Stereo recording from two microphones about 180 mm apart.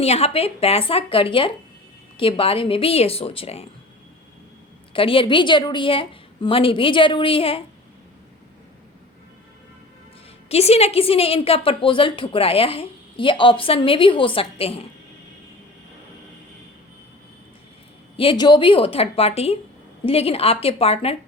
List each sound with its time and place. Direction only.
0.0 s a woman's voice: 35° left (ahead or behind)
4.9 s a woman's voice: 30° left (ahead or behind)
10.5 s a woman's voice: 35° left (ahead or behind)
18.2 s a woman's voice: 25° left (ahead or behind)